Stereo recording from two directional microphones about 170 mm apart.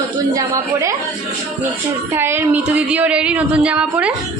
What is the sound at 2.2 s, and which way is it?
A woman's voice, 15° right (ahead or behind).